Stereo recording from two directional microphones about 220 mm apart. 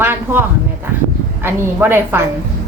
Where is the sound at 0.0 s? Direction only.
10° right (ahead or behind).